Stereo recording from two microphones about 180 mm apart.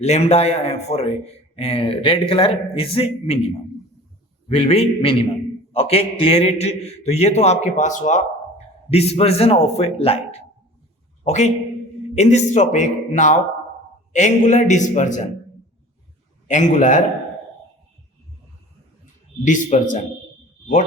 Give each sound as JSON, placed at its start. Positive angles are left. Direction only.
{"t": 0.0, "sound": "a man's voice", "side_deg": 35}
{"t": 11.2, "sound": "a man's voice", "side_deg": 40}
{"t": 16.5, "sound": "a man's voice", "side_deg": 45}
{"t": 19.5, "sound": "a man's voice", "side_deg": 45}